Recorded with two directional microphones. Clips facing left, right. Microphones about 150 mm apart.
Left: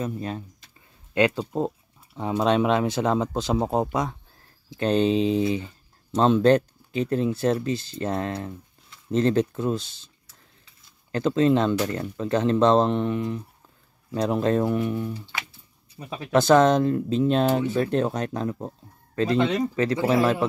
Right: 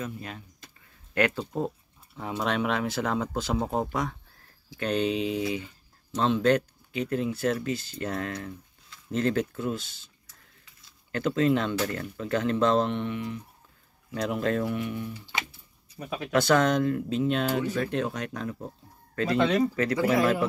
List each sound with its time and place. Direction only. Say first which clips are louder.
0.0 s speech: left 7 dB; 35° left (ahead or behind)
1.1 s speech: left 4 dB; 20° left (ahead or behind); by 15.2 s 40° left (ahead or behind)
16.1 s speech: left 5 dB; 25° left (ahead or behind)